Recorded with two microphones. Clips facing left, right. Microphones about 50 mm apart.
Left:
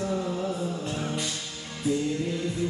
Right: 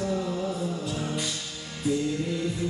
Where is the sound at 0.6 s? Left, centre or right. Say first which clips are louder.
Even; left.